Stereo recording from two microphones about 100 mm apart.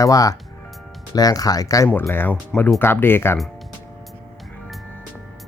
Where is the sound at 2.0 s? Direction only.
20° left (ahead or behind).